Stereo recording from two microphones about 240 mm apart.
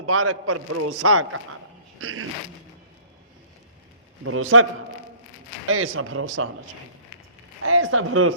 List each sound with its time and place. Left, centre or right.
0.0 s a man's voice: right
2.0 s a sound: right
4.2 s a man's voice: right
5.6 s a man's voice: right
7.6 s a man's voice: right